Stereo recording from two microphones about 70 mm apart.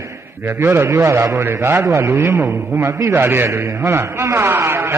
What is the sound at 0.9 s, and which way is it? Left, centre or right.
A man's voice, right.